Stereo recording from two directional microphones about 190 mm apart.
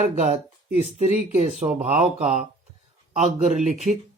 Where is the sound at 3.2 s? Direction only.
40° right (ahead or behind).